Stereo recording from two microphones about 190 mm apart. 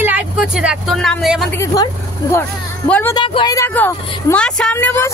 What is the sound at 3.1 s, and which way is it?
Speech, 25° left (ahead or behind).